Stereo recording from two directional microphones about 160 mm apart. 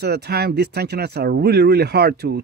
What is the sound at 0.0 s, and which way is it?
Speech, 90° right.